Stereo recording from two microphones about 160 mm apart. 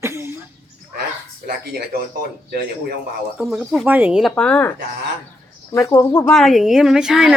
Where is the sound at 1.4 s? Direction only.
75° right (ahead or behind).